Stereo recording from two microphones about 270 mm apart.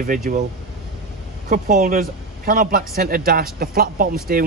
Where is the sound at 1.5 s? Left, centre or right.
Right.